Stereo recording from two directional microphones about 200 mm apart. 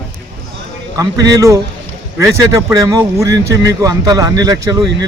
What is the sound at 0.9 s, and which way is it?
Speech, 15° right (ahead or behind).